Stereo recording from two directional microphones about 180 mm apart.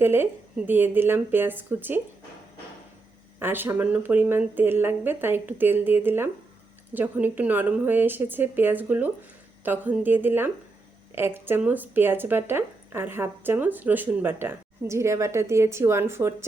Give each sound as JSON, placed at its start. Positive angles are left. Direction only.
{"t": 0.0, "sound": "speech", "side_deg": -10}
{"t": 3.4, "sound": "speech", "side_deg": -10}